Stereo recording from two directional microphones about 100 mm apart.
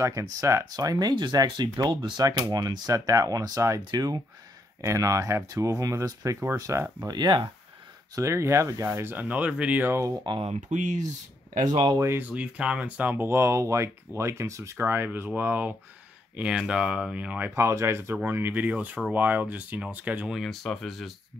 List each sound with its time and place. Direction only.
0.0 s speech: 35° right (ahead or behind); by 2.2 s 50° right (ahead or behind)
2.2 s speech: 40° right (ahead or behind)
7.1 s speech: 45° right (ahead or behind)
8.1 s speech: 30° right (ahead or behind); by 9.9 s 15° right (ahead or behind)
10.3 s speech: 50° right (ahead or behind)
11.6 s speech: 45° right (ahead or behind)
12.0 s speech: 25° right (ahead or behind)
12.3 s speech: 10° right (ahead or behind)
17.6 s speech: 25° right (ahead or behind)
20.3 s speech: 5° left (ahead or behind)